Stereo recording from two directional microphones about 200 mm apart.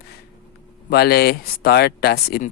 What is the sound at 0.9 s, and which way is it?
Speech, 50° left (ahead or behind).